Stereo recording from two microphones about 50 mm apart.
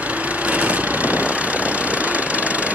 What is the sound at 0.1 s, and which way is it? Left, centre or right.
Vehicle, right.